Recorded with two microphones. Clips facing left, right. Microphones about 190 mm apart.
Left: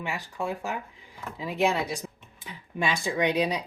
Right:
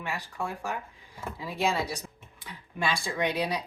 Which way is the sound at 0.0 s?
15° left (ahead or behind).